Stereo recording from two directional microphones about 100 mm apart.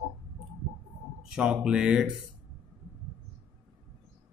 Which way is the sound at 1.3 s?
10° right (ahead or behind).